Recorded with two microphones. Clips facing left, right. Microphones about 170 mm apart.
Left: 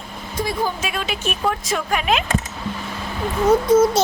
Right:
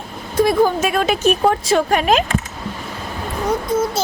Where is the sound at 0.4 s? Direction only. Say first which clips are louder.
Right 9 dB; 50° right (ahead or behind).